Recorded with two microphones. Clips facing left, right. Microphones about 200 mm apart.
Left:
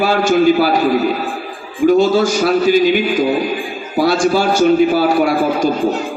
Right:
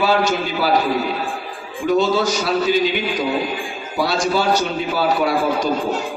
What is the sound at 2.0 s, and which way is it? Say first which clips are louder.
A man's voice: left 5 dB; 50° left (ahead or behind).